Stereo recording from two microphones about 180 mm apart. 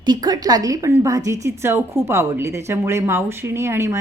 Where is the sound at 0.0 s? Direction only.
25° right (ahead or behind).